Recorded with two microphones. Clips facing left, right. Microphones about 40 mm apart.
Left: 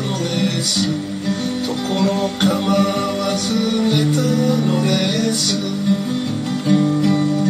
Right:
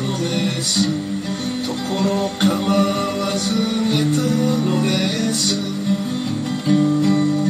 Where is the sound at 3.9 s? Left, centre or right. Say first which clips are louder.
Left 1 dB; centre.